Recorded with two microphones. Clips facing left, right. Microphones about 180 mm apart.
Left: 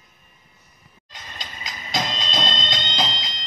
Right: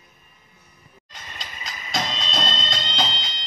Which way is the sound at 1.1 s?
Centre (ahead or behind).